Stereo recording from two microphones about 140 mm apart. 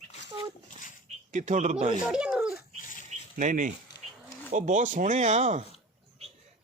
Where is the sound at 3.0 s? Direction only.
60° right (ahead or behind).